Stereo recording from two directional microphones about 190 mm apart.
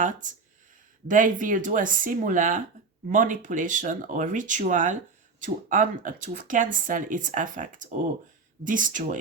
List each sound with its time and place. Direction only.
0.0 s speech: 45° right (ahead or behind)